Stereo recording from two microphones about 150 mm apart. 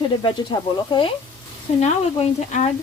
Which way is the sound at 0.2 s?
30° left (ahead or behind).